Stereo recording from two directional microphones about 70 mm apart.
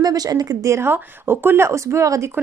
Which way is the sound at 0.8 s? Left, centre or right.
Right.